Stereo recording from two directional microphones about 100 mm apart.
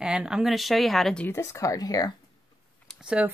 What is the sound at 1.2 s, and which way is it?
Speech, 25° left (ahead or behind).